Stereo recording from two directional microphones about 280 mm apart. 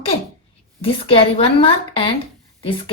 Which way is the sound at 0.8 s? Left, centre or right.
Centre.